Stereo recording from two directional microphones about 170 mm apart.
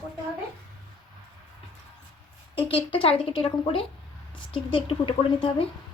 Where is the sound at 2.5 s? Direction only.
35° left (ahead or behind).